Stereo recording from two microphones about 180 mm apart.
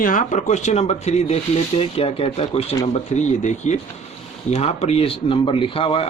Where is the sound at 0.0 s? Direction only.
45° left (ahead or behind).